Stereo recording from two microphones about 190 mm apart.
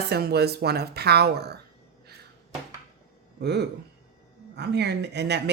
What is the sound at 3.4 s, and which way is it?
Speech, 60° right (ahead or behind).